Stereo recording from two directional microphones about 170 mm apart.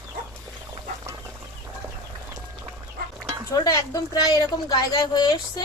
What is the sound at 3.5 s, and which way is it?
A woman's voice, 20° left (ahead or behind).